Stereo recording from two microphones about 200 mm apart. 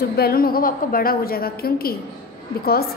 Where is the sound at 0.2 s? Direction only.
50° left (ahead or behind).